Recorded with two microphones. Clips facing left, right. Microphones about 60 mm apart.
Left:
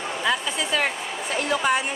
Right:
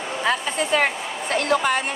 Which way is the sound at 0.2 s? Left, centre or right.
Right.